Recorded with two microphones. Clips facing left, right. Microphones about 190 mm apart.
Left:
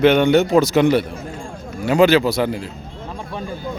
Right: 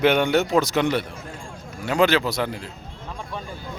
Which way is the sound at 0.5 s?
5° left (ahead or behind).